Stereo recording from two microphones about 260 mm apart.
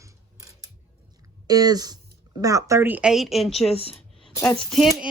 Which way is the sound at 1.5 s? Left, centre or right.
Centre.